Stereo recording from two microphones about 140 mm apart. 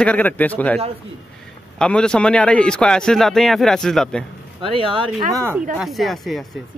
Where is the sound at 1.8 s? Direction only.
5° left (ahead or behind).